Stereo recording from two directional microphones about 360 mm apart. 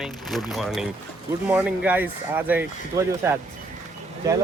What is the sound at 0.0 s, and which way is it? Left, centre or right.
Speech, centre.